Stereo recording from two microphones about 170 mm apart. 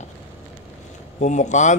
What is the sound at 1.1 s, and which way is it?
Speech, 45° left (ahead or behind).